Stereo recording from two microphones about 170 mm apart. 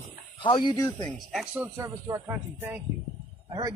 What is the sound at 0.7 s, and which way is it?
Speech, 15° left (ahead or behind).